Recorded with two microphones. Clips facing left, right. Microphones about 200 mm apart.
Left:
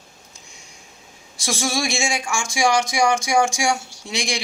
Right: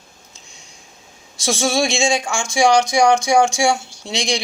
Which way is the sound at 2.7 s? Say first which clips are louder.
Right 5 dB; 65° right (ahead or behind).